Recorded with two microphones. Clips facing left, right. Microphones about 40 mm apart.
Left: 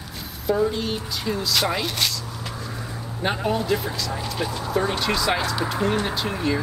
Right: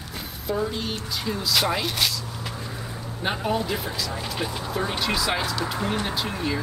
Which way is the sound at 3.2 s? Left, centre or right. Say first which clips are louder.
Left 2 dB; centre.